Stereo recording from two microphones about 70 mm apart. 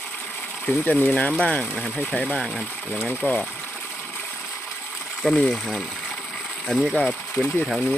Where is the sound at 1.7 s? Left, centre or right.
Centre.